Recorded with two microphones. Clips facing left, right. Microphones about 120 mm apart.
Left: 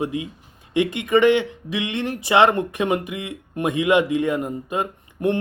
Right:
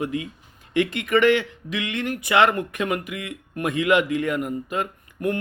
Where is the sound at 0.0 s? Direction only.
20° left (ahead or behind).